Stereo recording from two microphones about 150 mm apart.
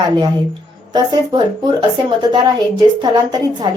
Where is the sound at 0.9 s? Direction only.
30° right (ahead or behind).